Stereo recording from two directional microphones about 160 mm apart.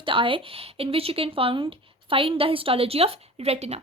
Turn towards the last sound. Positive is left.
turn(degrees=-40)  # may be behind; listen again after turning